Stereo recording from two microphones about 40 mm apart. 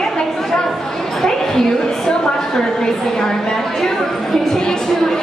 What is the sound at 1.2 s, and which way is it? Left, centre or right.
A woman's voice, centre.